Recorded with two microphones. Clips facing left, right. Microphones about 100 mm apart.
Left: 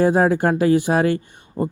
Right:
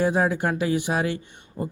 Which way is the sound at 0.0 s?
45° left (ahead or behind).